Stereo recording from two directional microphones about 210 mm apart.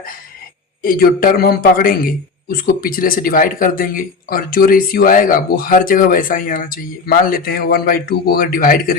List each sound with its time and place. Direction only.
0.8 s a man's voice: 45° left (ahead or behind)